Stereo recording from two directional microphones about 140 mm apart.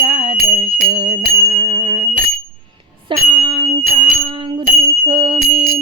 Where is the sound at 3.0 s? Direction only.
35° right (ahead or behind).